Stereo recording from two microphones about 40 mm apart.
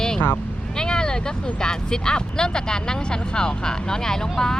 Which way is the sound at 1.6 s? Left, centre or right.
Centre.